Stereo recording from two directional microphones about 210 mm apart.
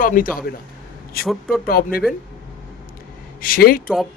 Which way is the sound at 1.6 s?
45° left (ahead or behind).